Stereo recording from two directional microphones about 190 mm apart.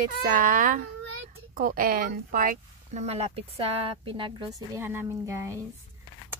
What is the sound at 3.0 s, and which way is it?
Speech, 35° right (ahead or behind).